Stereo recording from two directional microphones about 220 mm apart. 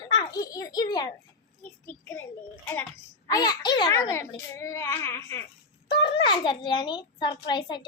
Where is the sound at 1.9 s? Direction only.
10° left (ahead or behind).